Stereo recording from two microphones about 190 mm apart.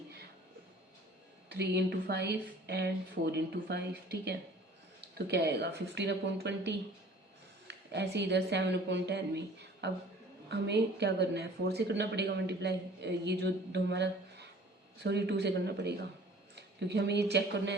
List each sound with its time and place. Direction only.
1.5 s speech: 60° right (ahead or behind)